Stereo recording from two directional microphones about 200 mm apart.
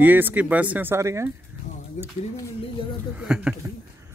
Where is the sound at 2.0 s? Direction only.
35° left (ahead or behind).